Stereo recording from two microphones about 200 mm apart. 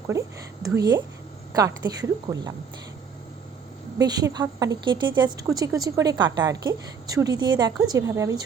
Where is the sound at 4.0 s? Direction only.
20° right (ahead or behind).